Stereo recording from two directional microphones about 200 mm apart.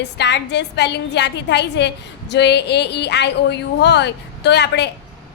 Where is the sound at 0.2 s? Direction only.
60° left (ahead or behind).